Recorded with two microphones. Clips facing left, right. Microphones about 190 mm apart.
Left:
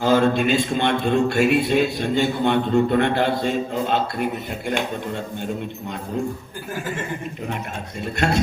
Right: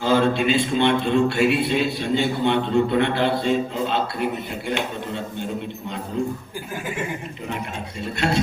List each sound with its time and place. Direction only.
0.0 s a man's voice: 45° left (ahead or behind)
8.2 s a man's voice: 45° left (ahead or behind)